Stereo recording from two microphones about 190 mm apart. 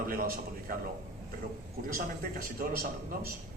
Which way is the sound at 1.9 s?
50° right (ahead or behind).